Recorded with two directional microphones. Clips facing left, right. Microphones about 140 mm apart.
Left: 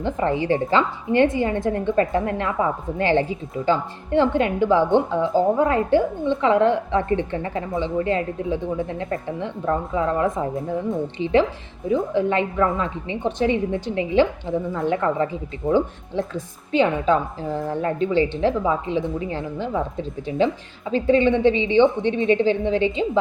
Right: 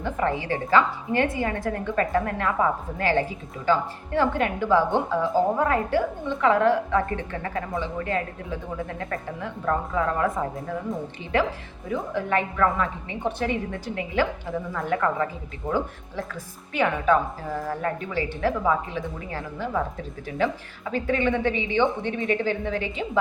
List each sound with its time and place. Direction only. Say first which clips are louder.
0.0 s a woman's voice: left 4 dB; 25° left (ahead or behind)
11.9 s a woman's voice: left 6 dB; 25° left (ahead or behind)